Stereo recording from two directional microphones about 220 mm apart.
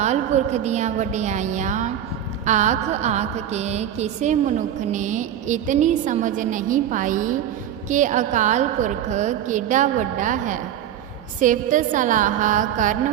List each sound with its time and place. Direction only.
0.0 s a woman's voice: 30° right (ahead or behind)